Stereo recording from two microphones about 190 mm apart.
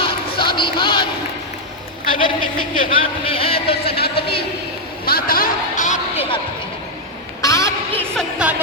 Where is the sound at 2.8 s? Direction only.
30° left (ahead or behind).